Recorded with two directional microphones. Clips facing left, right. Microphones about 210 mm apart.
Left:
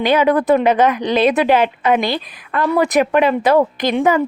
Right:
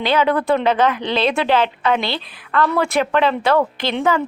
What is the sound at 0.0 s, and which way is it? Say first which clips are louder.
Speech: left 3 dB; 15° left (ahead or behind).